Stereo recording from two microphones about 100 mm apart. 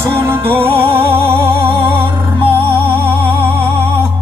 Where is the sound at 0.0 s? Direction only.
25° right (ahead or behind).